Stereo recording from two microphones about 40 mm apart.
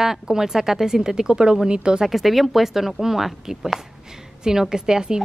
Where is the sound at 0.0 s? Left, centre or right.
Centre.